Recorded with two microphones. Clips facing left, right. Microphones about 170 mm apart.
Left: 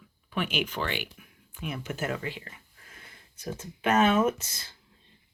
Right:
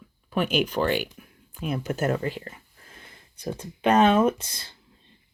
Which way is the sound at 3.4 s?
30° right (ahead or behind).